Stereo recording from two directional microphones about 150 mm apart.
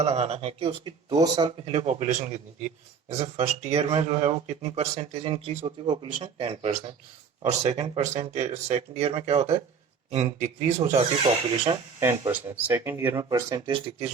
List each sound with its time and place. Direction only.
0.0 s speech: 45° right (ahead or behind)
1.1 s speech: 25° right (ahead or behind)
1.5 s speech: 40° right (ahead or behind)
11.9 s speech: 20° right (ahead or behind)
13.3 s speech: 25° right (ahead or behind)